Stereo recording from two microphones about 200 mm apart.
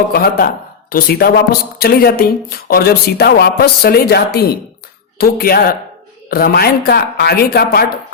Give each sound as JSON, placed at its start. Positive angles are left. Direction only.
{"t": 0.1, "sound": "speech", "side_deg": 50}